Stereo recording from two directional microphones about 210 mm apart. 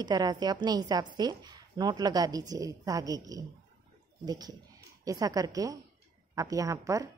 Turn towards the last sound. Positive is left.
turn(degrees=-15)  # may be behind; listen again after turning